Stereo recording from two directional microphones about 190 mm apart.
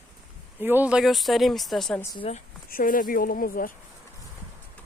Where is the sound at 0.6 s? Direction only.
10° right (ahead or behind).